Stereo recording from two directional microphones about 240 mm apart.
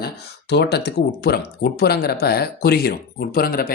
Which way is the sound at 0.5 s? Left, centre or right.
Left.